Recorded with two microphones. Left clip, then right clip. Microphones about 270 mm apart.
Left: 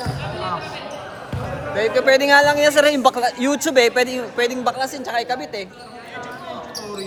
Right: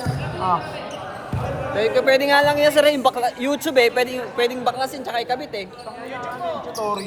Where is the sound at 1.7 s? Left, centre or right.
Left.